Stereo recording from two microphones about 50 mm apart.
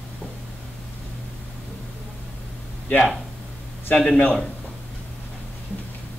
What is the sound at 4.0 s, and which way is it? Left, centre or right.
Speech, left.